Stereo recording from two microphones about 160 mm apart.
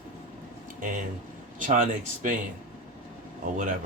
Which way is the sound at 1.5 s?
55° right (ahead or behind).